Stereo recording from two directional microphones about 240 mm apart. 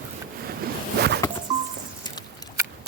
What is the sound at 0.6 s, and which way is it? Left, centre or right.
Zipper, right.